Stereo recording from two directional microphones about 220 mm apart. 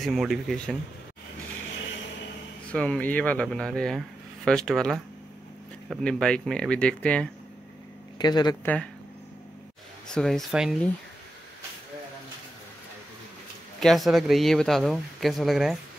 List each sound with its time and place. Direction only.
0.0 s speech: centre (ahead or behind)
2.7 s speech: 5° left (ahead or behind)
8.2 s speech: 20° left (ahead or behind)
10.0 s speech: centre (ahead or behind)
13.7 s speech: centre (ahead or behind)